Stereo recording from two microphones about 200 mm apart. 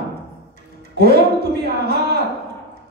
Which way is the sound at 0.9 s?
50° right (ahead or behind).